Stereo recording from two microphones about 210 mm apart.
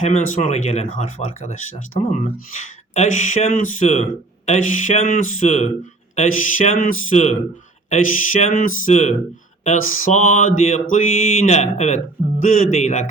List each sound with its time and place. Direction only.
0.0 s speech: 35° left (ahead or behind)